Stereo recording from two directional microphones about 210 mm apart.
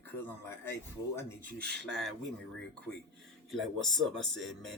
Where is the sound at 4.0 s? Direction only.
Centre (ahead or behind).